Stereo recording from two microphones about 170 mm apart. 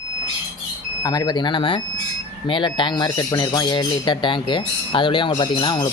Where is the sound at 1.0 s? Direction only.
25° left (ahead or behind).